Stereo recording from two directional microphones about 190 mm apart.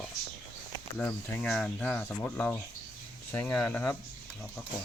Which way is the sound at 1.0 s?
10° left (ahead or behind).